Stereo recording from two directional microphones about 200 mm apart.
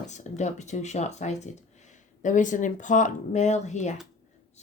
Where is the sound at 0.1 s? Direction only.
35° left (ahead or behind).